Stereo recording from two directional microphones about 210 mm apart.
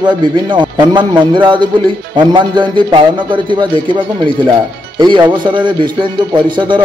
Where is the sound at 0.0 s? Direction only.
20° right (ahead or behind).